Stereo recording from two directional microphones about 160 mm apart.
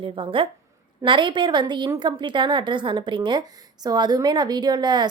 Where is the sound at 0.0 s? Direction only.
30° right (ahead or behind).